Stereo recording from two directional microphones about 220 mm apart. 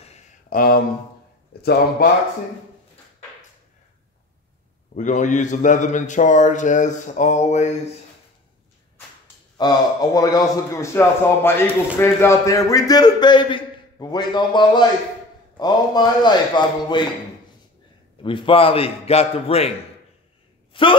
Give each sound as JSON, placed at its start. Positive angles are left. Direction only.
{"t": 0.0, "sound": "a sound", "side_deg": 35}
{"t": 1.5, "sound": "a man's voice", "side_deg": 45}
{"t": 4.9, "sound": "a man's voice", "side_deg": 35}
{"t": 9.6, "sound": "a man's voice", "side_deg": 20}
{"t": 18.2, "sound": "a man's voice", "side_deg": 25}
{"t": 20.7, "sound": "a man's voice", "side_deg": 25}